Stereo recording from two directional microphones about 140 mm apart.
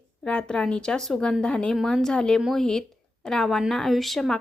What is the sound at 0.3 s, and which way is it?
A woman's voice, 10° left (ahead or behind).